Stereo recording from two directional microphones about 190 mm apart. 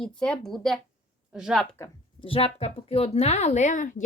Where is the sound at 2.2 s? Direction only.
30° left (ahead or behind).